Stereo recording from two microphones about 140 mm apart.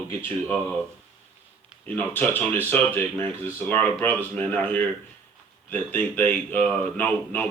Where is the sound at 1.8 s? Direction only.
10° left (ahead or behind).